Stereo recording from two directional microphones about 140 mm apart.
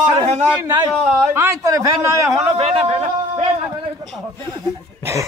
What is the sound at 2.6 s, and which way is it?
Speech, 45° right (ahead or behind).